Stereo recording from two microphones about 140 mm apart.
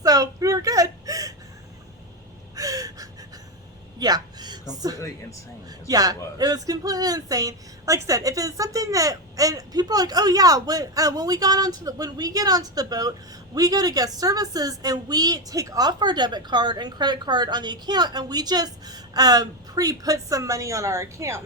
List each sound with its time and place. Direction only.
0.0 s whimper: 25° right (ahead or behind)
2.6 s gasp: 25° right (ahead or behind)
3.9 s a sound: 30° right (ahead or behind)
5.9 s speech: 25° right (ahead or behind)